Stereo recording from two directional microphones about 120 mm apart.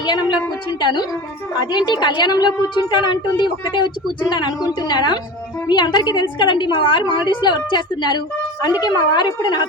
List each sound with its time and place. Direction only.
0.0 s a woman's voice: 40° left (ahead or behind)